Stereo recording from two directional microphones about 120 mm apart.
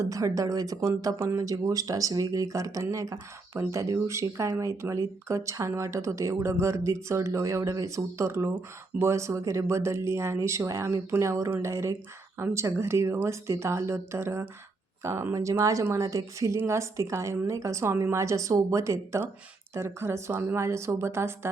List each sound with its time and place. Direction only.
0.0 s speech: 25° right (ahead or behind)